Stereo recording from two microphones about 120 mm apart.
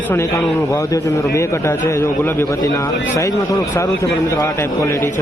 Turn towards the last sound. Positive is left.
turn(degrees=25)  # may be behind; listen again after turning